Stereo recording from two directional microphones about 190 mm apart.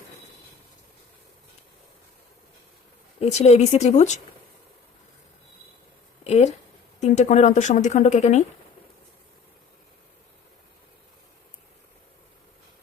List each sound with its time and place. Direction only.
3.2 s a woman's voice: 35° left (ahead or behind)
6.2 s a sound: 35° left (ahead or behind)
7.0 s a woman's voice: 40° left (ahead or behind)